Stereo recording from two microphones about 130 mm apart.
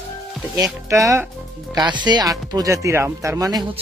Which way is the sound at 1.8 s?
35° right (ahead or behind).